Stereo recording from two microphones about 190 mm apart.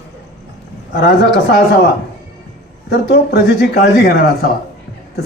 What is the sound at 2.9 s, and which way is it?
Speech, 55° left (ahead or behind).